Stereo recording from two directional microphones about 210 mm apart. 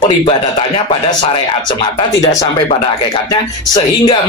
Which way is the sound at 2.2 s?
15° left (ahead or behind).